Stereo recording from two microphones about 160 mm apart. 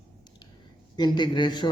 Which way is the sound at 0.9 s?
25° left (ahead or behind).